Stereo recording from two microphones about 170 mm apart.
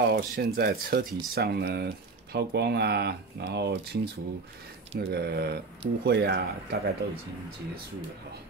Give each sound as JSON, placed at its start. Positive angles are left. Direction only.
{"t": 0.0, "sound": "speech", "side_deg": -70}